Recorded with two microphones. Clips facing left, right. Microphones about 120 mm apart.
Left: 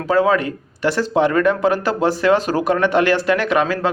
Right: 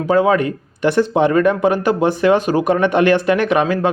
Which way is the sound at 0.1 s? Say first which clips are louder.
Right 2 dB; 20° right (ahead or behind).